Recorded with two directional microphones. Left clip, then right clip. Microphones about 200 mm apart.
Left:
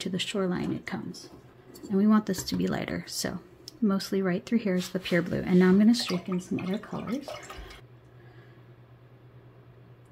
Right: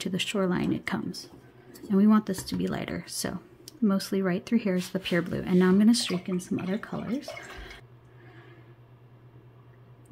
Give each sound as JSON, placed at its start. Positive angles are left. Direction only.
{"t": 0.0, "sound": "speech", "side_deg": -15}
{"t": 6.0, "sound": "speech", "side_deg": 15}
{"t": 6.6, "sound": "speech", "side_deg": -15}